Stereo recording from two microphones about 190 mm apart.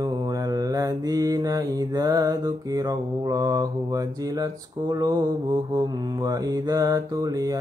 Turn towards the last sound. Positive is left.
turn(degrees=-20)  # may be behind; listen again after turning